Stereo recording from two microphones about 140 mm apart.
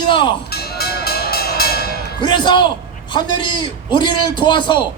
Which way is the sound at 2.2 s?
35° left (ahead or behind).